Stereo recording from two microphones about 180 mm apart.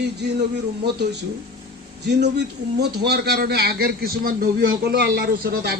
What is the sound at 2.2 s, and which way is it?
A man's voice, 65° right (ahead or behind).